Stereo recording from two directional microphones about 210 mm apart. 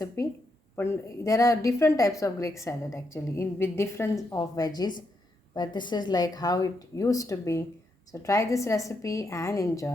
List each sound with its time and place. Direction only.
0.2 s a woman's voice: 15° left (ahead or behind)